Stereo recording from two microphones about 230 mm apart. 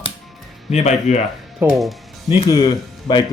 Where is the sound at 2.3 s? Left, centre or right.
Left.